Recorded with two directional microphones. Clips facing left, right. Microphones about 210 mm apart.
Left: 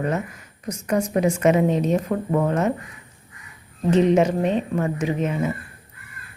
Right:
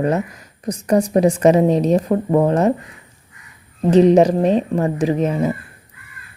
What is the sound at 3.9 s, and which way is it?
Speech, 35° right (ahead or behind).